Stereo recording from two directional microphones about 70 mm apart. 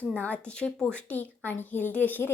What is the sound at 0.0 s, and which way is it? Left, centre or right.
Speech, left.